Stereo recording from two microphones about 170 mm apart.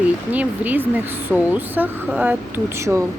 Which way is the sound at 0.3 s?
10° right (ahead or behind).